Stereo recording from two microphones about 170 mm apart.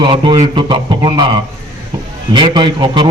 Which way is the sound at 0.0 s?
25° right (ahead or behind).